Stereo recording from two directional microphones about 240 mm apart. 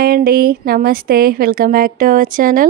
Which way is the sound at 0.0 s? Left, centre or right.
Right.